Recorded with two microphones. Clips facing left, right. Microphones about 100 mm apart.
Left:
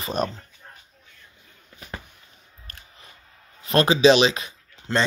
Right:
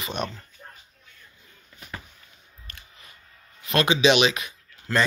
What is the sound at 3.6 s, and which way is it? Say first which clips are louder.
Speech: left 4 dB; 35° left (ahead or behind).